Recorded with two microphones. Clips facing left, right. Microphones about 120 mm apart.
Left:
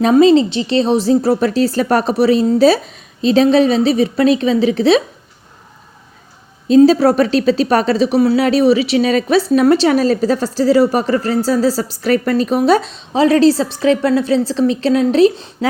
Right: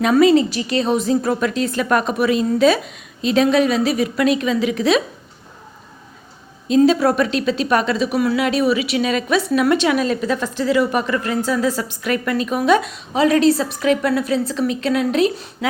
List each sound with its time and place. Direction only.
0.0 s a woman's voice: 25° left (ahead or behind)
6.7 s a woman's voice: 35° left (ahead or behind)